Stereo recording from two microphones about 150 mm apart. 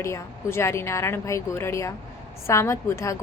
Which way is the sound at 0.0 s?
20° left (ahead or behind).